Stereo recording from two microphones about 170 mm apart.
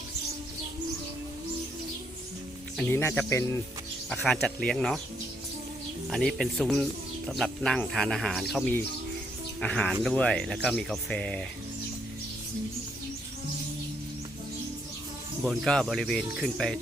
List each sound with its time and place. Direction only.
2.9 s speech: 15° left (ahead or behind)
4.1 s speech: 5° left (ahead or behind)
6.1 s speech: centre (ahead or behind)
9.6 s speech: 5° left (ahead or behind)
15.4 s speech: 5° left (ahead or behind)